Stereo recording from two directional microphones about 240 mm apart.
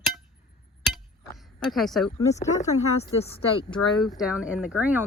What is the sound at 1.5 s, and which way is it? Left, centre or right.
Speech, centre.